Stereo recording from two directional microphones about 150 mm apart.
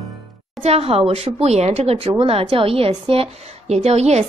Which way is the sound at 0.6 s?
45° right (ahead or behind).